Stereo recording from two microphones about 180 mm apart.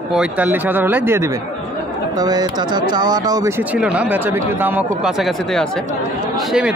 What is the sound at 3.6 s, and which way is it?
Speech, 5° right (ahead or behind).